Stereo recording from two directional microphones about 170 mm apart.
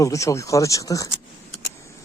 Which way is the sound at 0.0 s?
20° left (ahead or behind).